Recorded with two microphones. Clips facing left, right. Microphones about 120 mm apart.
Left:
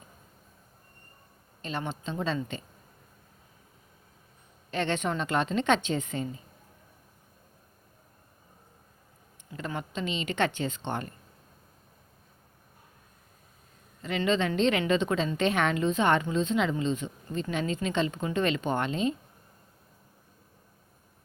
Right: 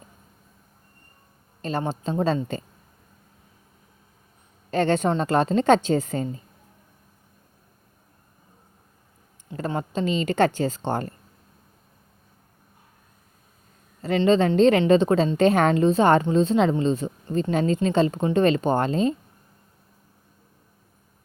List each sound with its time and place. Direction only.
1.6 s speech: 40° right (ahead or behind)
4.7 s speech: 40° right (ahead or behind)
9.5 s speech: 35° right (ahead or behind)
14.2 s speech: 35° right (ahead or behind)